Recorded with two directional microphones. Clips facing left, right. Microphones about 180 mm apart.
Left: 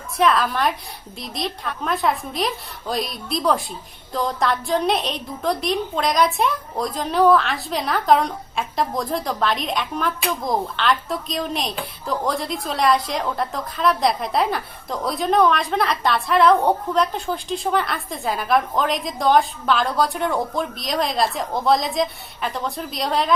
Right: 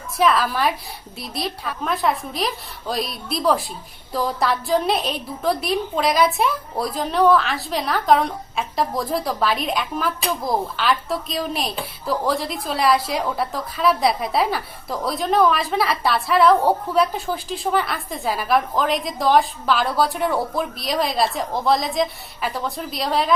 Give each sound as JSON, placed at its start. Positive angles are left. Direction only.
{"t": 0.2, "sound": "a woman's voice", "side_deg": -5}